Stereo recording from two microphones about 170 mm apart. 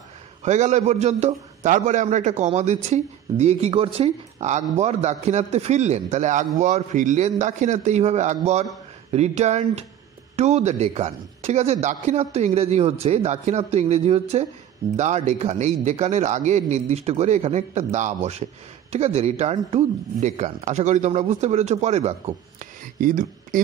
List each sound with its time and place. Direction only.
0.4 s a man's voice: 45° right (ahead or behind)
22.9 s a man's voice: 55° right (ahead or behind)